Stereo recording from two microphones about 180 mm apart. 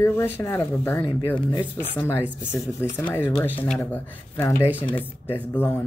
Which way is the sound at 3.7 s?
10° left (ahead or behind).